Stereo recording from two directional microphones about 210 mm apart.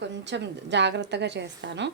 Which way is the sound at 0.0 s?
55° right (ahead or behind).